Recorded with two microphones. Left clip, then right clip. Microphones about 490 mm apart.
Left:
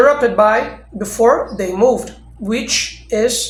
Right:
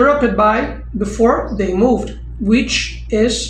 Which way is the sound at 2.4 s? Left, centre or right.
Left.